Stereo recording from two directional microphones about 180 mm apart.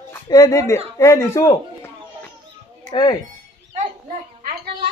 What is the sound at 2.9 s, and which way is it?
Speech, 25° left (ahead or behind).